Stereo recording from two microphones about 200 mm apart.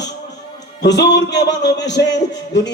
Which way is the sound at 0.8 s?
60° left (ahead or behind).